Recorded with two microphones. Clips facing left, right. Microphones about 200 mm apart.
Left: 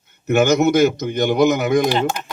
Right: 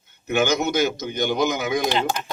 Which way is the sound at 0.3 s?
50° left (ahead or behind).